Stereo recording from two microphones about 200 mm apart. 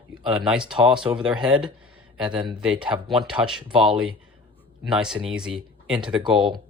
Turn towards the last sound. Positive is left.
turn(degrees=-25)  # may be behind; listen again after turning